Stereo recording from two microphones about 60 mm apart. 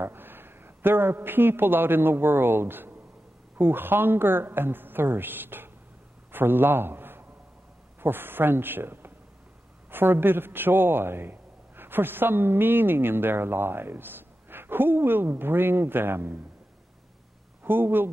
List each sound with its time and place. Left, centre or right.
0.0 s a man's voice: right
17.6 s a man's voice: right